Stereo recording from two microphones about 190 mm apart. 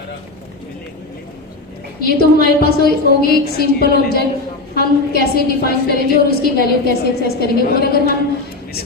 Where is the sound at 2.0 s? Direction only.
55° left (ahead or behind).